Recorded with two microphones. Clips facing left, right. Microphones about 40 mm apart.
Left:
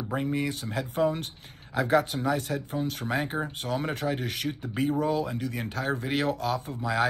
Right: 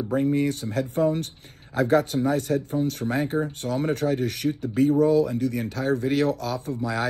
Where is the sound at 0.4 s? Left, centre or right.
Left.